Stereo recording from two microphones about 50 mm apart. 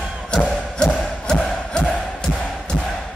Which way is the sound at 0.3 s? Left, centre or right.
Centre.